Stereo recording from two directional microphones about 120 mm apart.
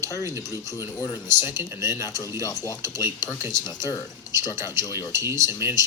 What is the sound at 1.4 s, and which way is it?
Speech, 20° right (ahead or behind).